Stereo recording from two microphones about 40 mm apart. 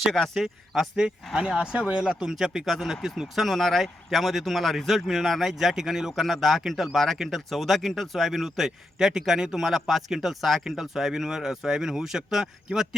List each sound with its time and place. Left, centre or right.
0.3 s a man's voice: centre
1.4 s a man's voice: right